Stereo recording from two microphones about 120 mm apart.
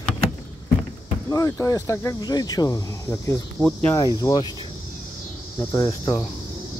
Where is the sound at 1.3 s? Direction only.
25° left (ahead or behind).